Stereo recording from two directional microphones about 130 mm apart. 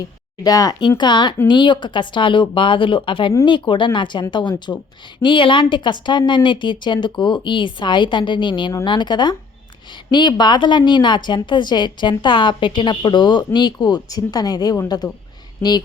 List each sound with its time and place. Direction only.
0.4 s a woman's voice: 25° left (ahead or behind)